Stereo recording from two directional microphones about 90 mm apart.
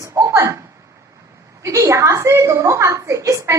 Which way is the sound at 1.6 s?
35° right (ahead or behind).